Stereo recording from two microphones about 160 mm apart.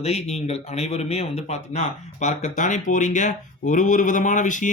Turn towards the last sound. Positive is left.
turn(degrees=50)  # may be behind; listen again after turning